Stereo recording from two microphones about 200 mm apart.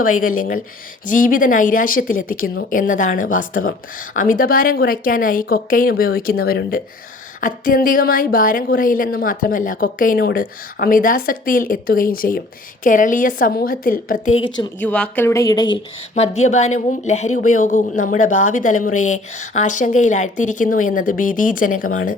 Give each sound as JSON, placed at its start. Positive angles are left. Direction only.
{"t": 0.0, "sound": "speech", "side_deg": 45}
{"t": 14.4, "sound": "speech", "side_deg": 20}
{"t": 14.8, "sound": "speech", "side_deg": 5}
{"t": 16.1, "sound": "a woman's voice", "side_deg": 35}